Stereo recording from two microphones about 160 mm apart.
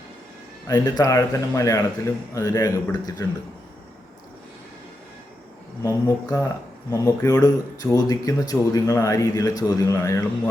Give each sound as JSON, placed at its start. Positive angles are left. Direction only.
{"t": 0.7, "sound": "speech", "side_deg": 25}
{"t": 5.8, "sound": "speech", "side_deg": 20}